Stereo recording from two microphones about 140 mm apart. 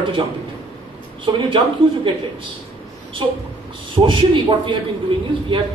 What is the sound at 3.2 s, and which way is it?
A man's voice, 35° right (ahead or behind).